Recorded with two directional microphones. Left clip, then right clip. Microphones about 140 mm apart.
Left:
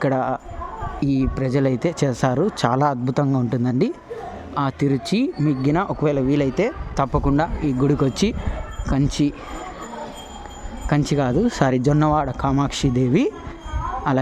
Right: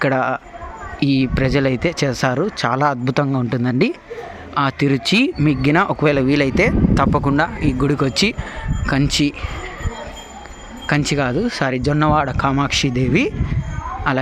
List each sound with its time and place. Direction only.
0.0 s speech: 15° left (ahead or behind)
2.7 s speech: 15° left (ahead or behind)
10.8 s speech: 15° left (ahead or behind)